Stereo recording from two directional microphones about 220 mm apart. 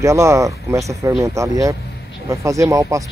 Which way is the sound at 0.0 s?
15° right (ahead or behind).